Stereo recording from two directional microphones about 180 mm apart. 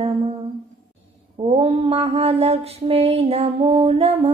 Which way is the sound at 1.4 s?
30° right (ahead or behind).